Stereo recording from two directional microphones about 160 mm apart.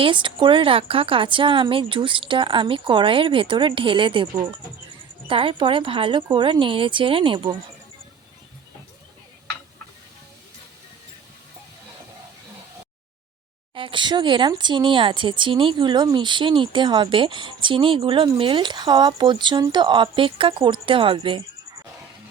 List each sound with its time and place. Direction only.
0.0 s speech: 30° right (ahead or behind)
5.3 s speech: 35° right (ahead or behind)
13.7 s speech: 30° right (ahead or behind)